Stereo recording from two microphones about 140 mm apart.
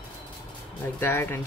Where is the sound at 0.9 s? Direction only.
15° left (ahead or behind).